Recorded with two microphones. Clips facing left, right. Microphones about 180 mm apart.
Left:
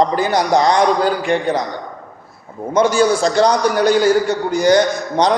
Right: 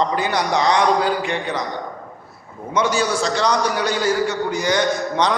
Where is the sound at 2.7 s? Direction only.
50° left (ahead or behind).